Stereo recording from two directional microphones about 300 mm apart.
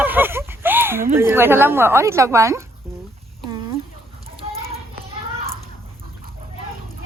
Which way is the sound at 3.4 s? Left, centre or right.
Centre.